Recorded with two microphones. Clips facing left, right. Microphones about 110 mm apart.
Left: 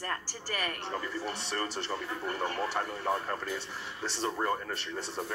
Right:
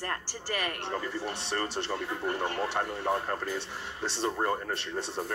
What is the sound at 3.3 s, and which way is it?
Speech, 40° right (ahead or behind).